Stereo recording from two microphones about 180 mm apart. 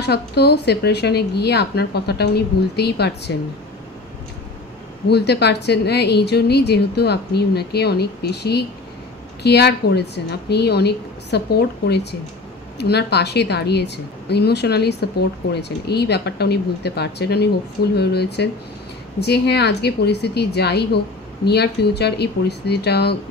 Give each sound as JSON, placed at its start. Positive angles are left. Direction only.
{"t": 0.0, "sound": "a woman's voice", "side_deg": 65}
{"t": 5.0, "sound": "a woman's voice", "side_deg": 65}